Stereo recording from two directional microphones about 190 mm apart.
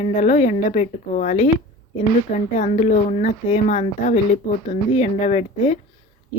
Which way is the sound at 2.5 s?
35° left (ahead or behind).